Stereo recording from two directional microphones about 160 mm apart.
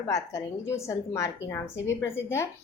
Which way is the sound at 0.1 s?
20° left (ahead or behind).